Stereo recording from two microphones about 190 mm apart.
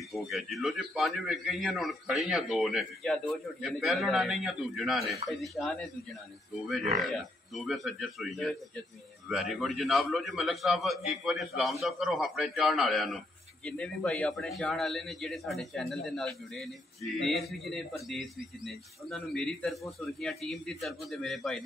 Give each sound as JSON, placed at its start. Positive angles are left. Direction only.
{"t": 0.1, "sound": "a man's voice", "side_deg": 0}
{"t": 6.8, "sound": "speech", "side_deg": -40}
{"t": 7.1, "sound": "a man's voice", "side_deg": 0}